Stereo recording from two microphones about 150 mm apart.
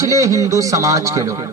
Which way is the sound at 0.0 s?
20° right (ahead or behind).